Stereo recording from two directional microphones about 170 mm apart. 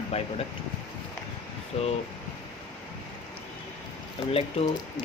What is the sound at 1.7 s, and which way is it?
Speech, 35° left (ahead or behind).